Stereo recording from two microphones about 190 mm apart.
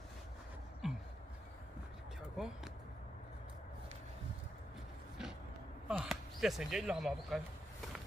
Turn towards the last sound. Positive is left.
turn(degrees=0)  # may be behind; listen again after turning